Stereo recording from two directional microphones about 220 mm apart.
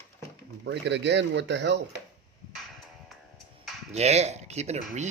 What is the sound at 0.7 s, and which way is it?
Speech, 55° right (ahead or behind).